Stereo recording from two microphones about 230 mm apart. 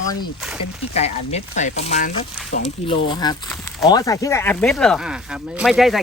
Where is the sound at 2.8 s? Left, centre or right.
Left.